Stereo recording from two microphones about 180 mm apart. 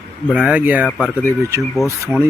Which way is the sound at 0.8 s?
5° left (ahead or behind).